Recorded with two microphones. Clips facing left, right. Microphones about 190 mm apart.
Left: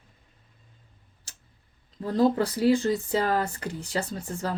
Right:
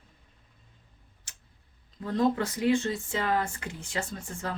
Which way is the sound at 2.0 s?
35° left (ahead or behind).